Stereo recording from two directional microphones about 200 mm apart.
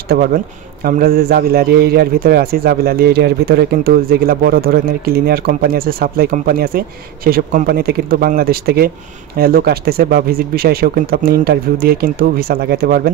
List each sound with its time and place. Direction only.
0.1 s a man's voice: 45° right (ahead or behind)